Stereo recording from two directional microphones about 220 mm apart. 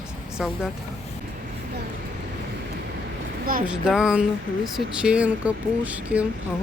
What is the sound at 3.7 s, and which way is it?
Speech, 5° right (ahead or behind).